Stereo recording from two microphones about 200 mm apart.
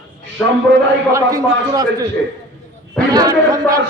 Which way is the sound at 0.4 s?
10° left (ahead or behind).